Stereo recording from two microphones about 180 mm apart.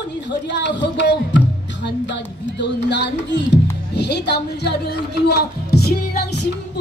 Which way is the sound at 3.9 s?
70° left (ahead or behind).